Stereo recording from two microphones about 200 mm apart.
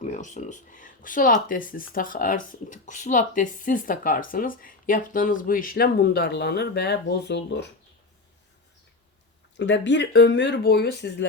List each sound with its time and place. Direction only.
0.0 s speech: 40° left (ahead or behind); by 7.7 s 60° left (ahead or behind)
9.6 s speech: 60° left (ahead or behind)